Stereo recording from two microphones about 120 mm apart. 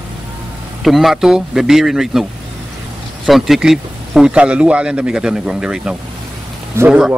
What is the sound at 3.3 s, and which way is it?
Speech, centre (ahead or behind).